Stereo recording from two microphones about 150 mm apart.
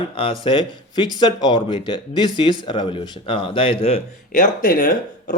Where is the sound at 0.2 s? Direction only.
35° left (ahead or behind).